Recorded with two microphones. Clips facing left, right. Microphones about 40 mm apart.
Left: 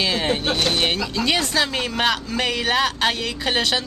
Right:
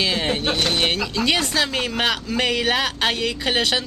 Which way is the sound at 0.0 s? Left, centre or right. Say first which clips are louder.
Even; centre.